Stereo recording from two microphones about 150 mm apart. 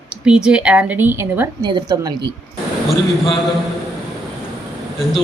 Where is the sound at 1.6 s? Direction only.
30° right (ahead or behind).